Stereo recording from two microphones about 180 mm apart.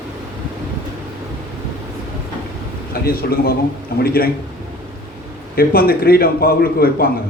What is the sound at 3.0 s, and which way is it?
A man's voice, 55° left (ahead or behind).